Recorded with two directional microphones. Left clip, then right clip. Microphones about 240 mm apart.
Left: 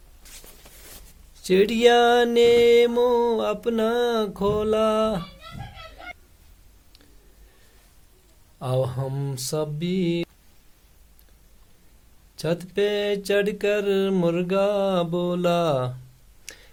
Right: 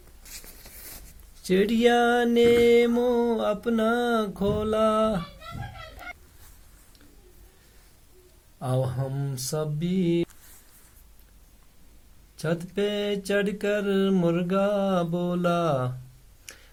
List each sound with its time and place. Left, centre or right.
1.5 s mantra: left
8.5 s mantra: left
12.4 s mantra: left
16.5 s tick-tock: left